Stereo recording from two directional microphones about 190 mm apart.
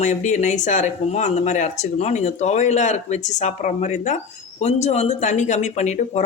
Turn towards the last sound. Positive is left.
turn(degrees=35)  # may be behind; listen again after turning